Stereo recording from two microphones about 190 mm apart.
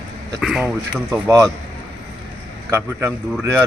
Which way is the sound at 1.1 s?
15° right (ahead or behind).